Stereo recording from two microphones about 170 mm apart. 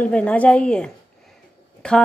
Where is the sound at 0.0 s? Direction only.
5° left (ahead or behind).